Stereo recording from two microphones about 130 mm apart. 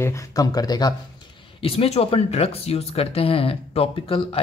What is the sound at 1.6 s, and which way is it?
Speech, 50° left (ahead or behind).